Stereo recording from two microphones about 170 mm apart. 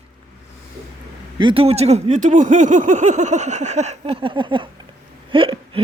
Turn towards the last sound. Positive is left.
turn(degrees=-30)  # may be behind; listen again after turning